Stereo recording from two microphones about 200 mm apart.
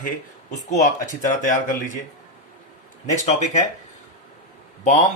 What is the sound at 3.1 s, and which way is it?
Speech, 35° left (ahead or behind).